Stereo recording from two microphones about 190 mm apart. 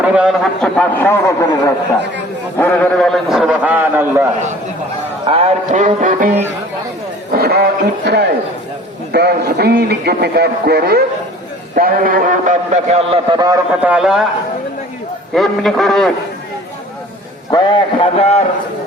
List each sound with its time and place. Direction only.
0.0 s a man's voice: 5° right (ahead or behind)
5.2 s a sound: 30° right (ahead or behind)
7.3 s a man's voice: 55° right (ahead or behind); by 13.4 s 35° right (ahead or behind)
13.8 s a man's voice: 5° right (ahead or behind)
15.4 s a man's voice: centre (ahead or behind)
17.5 s a man's voice: 20° left (ahead or behind)
18.0 s a man's voice: 35° left (ahead or behind)